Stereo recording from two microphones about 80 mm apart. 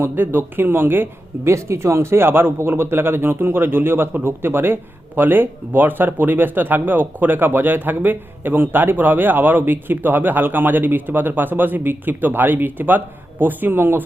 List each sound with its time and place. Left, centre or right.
0.0 s a man's voice: right
1.5 s a man's voice: right